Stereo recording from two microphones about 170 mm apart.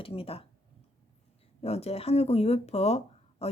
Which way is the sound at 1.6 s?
35° left (ahead or behind).